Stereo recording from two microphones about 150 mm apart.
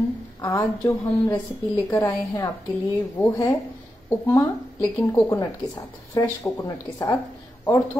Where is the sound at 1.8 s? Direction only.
25° left (ahead or behind).